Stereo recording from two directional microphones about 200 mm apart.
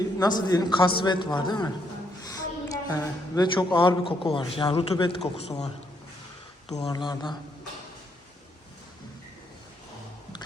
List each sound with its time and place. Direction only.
0.0 s a man's voice: 20° left (ahead or behind)
6.7 s a man's voice: 20° left (ahead or behind)